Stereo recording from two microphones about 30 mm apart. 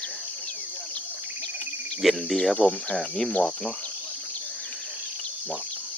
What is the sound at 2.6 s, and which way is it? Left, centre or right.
Speech, left.